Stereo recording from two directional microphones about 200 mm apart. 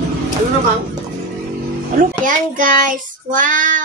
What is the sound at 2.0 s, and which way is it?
A child's voice, 40° right (ahead or behind).